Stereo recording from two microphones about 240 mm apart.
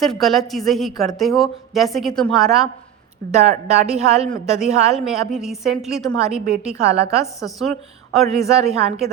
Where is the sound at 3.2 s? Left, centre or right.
Right.